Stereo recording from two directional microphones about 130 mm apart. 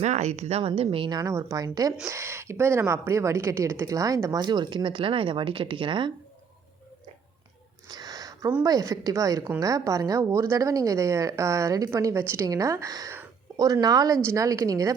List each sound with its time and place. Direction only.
0.0 s speech: 60° right (ahead or behind); by 1.2 s 40° right (ahead or behind)
1.2 s a woman's voice: 25° right (ahead or behind); by 6.1 s 40° right (ahead or behind)
7.9 s a sound: 30° right (ahead or behind)
8.6 s a woman's voice: 25° right (ahead or behind)